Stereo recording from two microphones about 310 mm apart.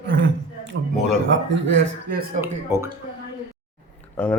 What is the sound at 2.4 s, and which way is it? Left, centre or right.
Speech, right.